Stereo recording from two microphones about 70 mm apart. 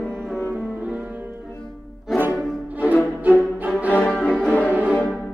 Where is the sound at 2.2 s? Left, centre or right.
Right.